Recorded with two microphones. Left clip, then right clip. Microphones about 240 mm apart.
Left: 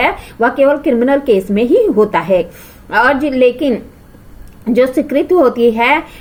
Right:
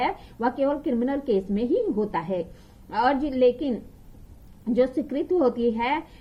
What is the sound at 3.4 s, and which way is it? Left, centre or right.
Speech, left.